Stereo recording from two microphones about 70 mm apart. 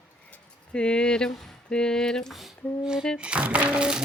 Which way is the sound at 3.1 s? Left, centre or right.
Centre.